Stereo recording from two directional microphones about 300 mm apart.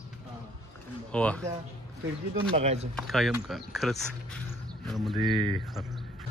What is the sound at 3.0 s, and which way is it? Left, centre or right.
Speech, centre.